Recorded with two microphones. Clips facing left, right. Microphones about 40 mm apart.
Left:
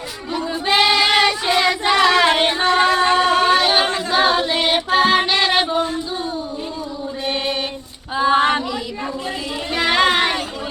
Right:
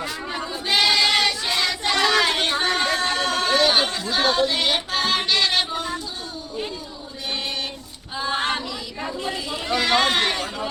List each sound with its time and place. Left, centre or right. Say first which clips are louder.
0.7 s child singing: left 4 dB; left
2.5 s music: left 6 dB; left
8.1 s female singing: left 9 dB; left
9.2 s chatter: left 2 dB; centre